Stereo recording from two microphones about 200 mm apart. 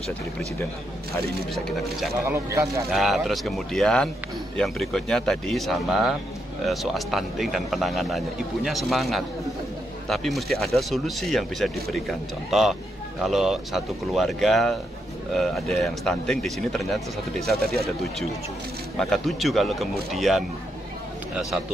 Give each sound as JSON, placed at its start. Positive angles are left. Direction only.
{"t": 1.5, "sound": "speech", "side_deg": 0}
{"t": 2.2, "sound": "speech", "side_deg": -15}
{"t": 2.9, "sound": "speech", "side_deg": 0}